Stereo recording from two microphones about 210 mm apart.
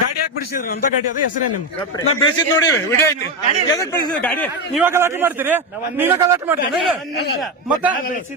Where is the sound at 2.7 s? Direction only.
15° left (ahead or behind).